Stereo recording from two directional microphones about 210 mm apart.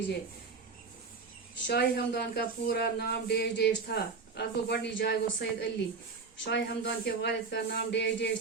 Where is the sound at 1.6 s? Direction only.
50° left (ahead or behind).